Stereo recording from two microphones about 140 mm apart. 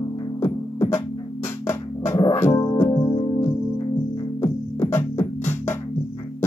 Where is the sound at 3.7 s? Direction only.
35° left (ahead or behind).